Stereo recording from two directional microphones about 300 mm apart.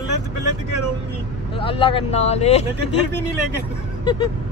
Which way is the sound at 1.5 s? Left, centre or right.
Centre.